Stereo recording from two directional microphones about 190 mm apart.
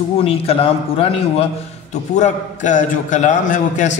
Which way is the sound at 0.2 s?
30° left (ahead or behind).